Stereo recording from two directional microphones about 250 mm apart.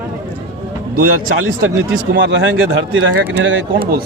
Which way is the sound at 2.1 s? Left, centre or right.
Right.